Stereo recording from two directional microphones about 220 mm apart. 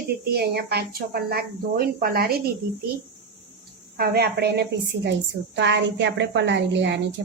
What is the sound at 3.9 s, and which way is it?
A woman's voice, 45° right (ahead or behind).